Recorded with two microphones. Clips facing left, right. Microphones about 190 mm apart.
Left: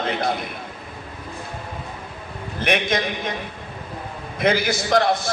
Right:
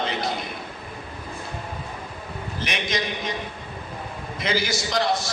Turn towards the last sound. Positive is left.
turn(degrees=55)  # may be behind; listen again after turning